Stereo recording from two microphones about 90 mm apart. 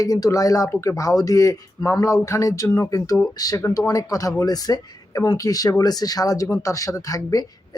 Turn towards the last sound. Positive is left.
turn(degrees=40)  # may be behind; listen again after turning